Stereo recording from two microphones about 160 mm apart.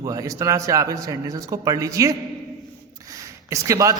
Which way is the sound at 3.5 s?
20° right (ahead or behind).